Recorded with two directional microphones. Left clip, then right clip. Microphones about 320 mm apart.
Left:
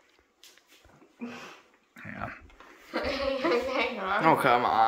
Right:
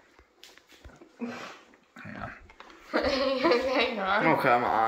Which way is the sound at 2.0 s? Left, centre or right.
Centre.